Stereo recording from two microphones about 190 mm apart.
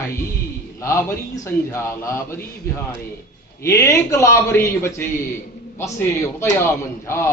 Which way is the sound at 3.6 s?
15° left (ahead or behind).